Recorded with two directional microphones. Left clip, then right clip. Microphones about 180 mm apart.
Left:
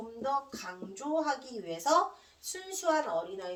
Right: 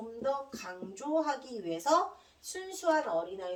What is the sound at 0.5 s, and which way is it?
Speech, 35° left (ahead or behind).